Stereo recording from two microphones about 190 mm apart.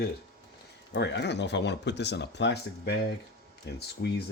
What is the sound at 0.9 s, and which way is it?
Speech, 65° left (ahead or behind).